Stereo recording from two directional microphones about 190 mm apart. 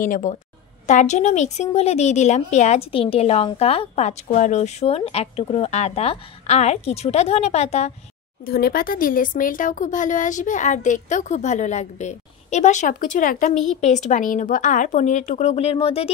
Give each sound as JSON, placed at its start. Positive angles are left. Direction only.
{"t": 0.0, "sound": "a woman's voice", "side_deg": 45}
{"t": 8.5, "sound": "a woman's voice", "side_deg": 50}